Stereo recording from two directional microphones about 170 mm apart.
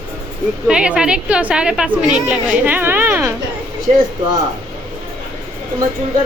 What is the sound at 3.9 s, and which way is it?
Speech, 40° right (ahead or behind).